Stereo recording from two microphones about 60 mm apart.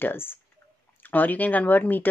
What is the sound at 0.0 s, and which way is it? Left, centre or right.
Speech, left.